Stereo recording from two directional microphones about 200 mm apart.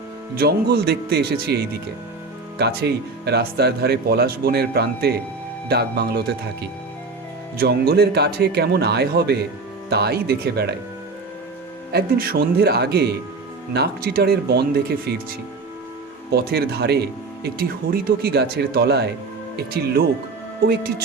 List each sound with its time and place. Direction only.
0.3 s speech: 50° right (ahead or behind)
11.9 s speech: 50° right (ahead or behind)
16.3 s speech: 50° right (ahead or behind)